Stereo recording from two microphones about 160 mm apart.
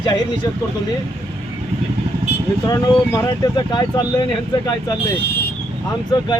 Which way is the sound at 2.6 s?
20° left (ahead or behind).